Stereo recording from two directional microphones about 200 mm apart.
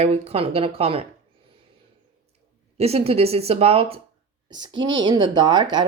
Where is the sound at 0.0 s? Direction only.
30° right (ahead or behind).